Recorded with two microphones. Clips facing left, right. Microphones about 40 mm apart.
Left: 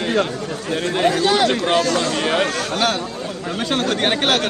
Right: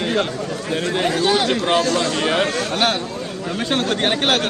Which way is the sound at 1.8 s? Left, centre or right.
Right.